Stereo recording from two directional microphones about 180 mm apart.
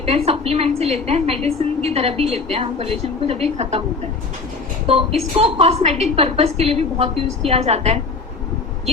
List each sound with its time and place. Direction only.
0.0 s a woman's voice: 35° right (ahead or behind)
5.4 s a woman's voice: 35° right (ahead or behind)